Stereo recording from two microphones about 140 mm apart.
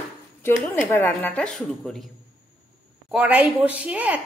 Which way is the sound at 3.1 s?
5° right (ahead or behind).